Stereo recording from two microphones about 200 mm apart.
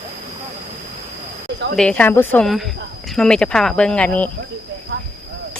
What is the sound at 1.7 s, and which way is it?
Speech, 5° left (ahead or behind).